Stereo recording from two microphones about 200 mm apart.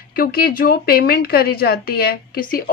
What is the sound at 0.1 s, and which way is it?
A woman's voice, 50° left (ahead or behind).